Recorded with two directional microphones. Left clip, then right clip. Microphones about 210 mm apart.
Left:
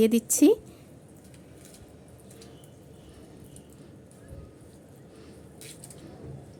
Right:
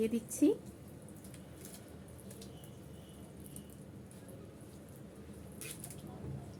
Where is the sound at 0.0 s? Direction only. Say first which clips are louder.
Left 11 dB; 50° left (ahead or behind).